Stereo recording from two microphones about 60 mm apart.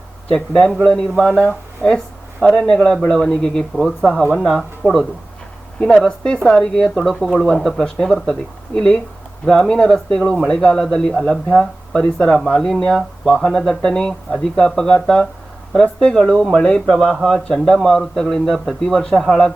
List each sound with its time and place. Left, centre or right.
0.3 s speech: centre
5.8 s speech: centre
7.1 s speech: centre